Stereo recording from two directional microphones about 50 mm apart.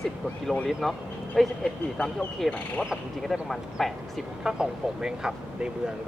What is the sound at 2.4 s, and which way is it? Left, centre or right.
Speech, left.